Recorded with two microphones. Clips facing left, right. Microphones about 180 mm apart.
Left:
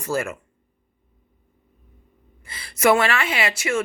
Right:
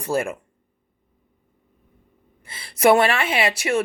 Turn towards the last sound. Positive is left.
turn(degrees=-35)  # may be behind; listen again after turning